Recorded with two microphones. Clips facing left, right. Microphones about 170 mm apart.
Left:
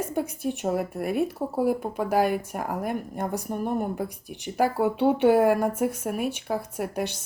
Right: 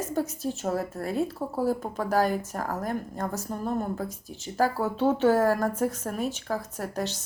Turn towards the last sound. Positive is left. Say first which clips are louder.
# left 2 dB
turn(degrees=10)  # may be behind; listen again after turning